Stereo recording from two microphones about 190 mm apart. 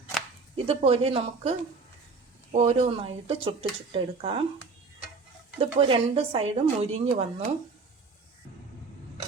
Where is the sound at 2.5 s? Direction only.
35° right (ahead or behind).